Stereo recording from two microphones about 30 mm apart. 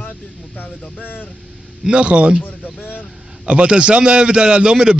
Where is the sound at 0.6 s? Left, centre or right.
Left.